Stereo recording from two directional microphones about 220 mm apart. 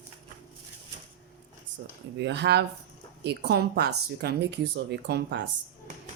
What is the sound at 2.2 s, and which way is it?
Speech, 50° right (ahead or behind).